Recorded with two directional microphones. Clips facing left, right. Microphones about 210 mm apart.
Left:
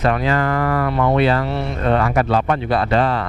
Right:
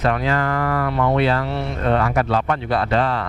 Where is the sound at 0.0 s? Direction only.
10° left (ahead or behind).